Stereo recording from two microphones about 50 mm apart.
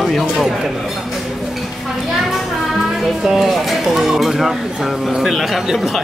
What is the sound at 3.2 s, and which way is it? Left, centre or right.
Speech, centre.